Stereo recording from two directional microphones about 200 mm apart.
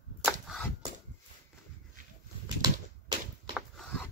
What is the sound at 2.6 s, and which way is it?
Typewriter, 20° right (ahead or behind).